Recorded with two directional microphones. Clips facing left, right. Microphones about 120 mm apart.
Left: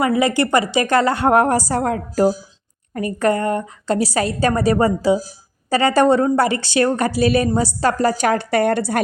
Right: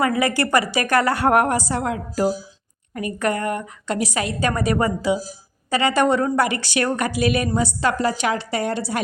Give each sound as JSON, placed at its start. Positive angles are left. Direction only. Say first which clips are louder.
{"t": 0.0, "sound": "a woman's voice", "louder": "left 3 dB", "side_deg": 25}